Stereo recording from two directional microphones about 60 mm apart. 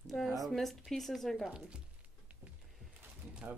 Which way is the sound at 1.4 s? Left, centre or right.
Centre.